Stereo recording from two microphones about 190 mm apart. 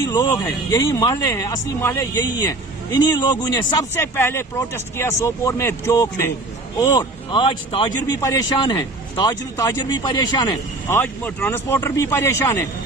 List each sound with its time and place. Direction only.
0.0 s a man's voice: 15° left (ahead or behind)